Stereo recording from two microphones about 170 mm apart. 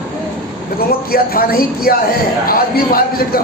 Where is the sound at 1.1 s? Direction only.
60° left (ahead or behind).